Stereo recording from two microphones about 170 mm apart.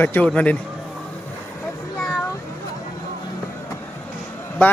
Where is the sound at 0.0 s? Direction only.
10° left (ahead or behind).